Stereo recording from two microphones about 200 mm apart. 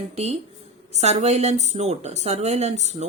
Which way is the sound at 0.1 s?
30° right (ahead or behind).